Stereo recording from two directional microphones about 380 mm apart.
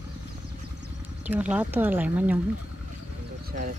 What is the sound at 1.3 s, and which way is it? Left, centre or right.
Speech, centre.